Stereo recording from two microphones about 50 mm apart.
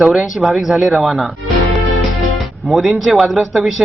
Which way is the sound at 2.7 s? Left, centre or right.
Centre.